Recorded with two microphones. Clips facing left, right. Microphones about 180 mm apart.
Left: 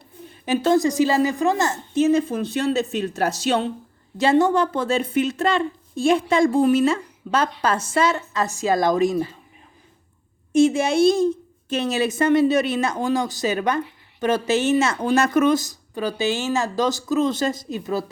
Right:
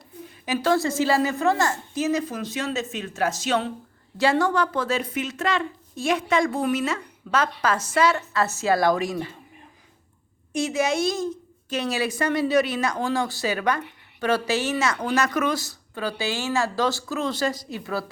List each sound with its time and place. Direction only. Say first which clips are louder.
0.4 s a woman's voice: left 4 dB; 25° left (ahead or behind)
4.2 s a woman's voice: left 4 dB; 20° left (ahead or behind)
10.5 s a woman's voice: left 7 dB; 25° left (ahead or behind)